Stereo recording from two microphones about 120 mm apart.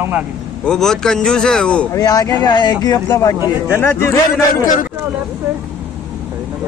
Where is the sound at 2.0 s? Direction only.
30° left (ahead or behind); by 4.2 s 15° left (ahead or behind).